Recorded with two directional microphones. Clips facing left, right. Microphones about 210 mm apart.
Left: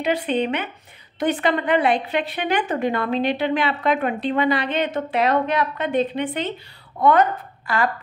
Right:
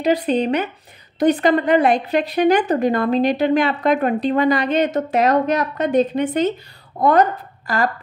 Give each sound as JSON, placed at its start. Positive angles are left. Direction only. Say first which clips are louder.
{"t": 0.0, "sound": "a woman's voice", "louder": "right 4 dB", "side_deg": -40}